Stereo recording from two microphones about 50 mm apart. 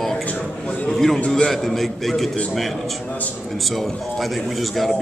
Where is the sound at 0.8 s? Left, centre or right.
Centre.